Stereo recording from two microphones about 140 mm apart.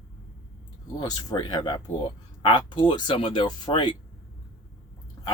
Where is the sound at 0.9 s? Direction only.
30° left (ahead or behind).